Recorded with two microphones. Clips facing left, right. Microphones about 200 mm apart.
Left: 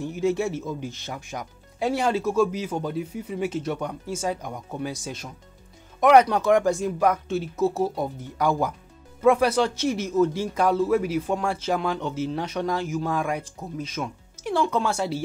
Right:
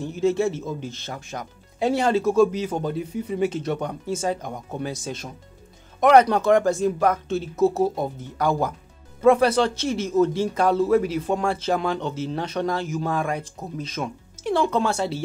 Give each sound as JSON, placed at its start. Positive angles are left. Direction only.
{"t": 0.0, "sound": "speech", "side_deg": 10}
{"t": 7.5, "sound": "speech", "side_deg": -20}
{"t": 8.2, "sound": "speech", "side_deg": 10}